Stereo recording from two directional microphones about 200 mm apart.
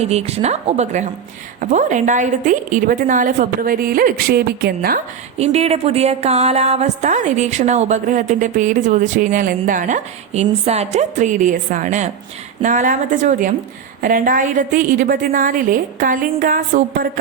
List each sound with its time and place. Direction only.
0.0 s a woman's voice: 30° right (ahead or behind); by 4.9 s 50° right (ahead or behind)
5.4 s a woman's voice: 30° right (ahead or behind)